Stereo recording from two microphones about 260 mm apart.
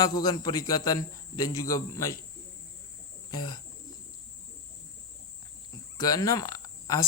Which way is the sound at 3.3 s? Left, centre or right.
Centre.